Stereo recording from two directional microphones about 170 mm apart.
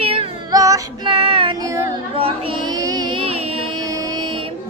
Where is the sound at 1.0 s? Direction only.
35° right (ahead or behind).